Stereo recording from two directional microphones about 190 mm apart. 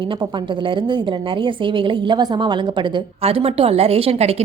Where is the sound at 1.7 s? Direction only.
25° right (ahead or behind).